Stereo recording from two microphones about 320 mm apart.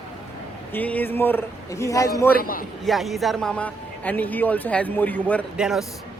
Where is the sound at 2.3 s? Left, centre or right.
Left.